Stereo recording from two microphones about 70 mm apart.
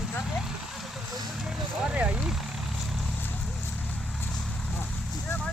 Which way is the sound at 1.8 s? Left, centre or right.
Centre.